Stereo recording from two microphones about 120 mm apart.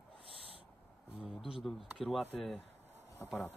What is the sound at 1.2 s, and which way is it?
Speech, 5° right (ahead or behind).